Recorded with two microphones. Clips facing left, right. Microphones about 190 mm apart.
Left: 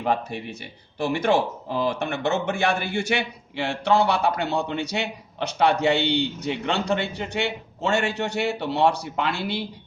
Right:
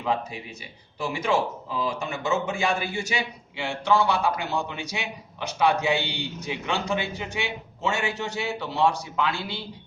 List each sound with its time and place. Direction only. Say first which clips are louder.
0.0 s a man's voice: left 3 dB; 65° left (ahead or behind)